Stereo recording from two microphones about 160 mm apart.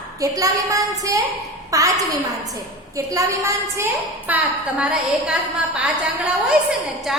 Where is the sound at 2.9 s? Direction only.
20° right (ahead or behind).